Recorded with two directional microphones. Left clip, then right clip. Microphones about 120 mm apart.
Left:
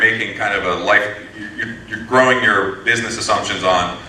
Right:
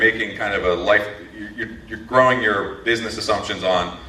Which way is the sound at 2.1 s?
45° left (ahead or behind).